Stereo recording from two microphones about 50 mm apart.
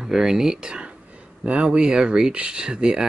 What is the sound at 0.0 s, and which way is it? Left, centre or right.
Speech, centre.